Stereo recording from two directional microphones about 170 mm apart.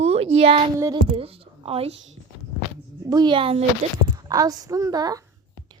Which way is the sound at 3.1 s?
25° right (ahead or behind).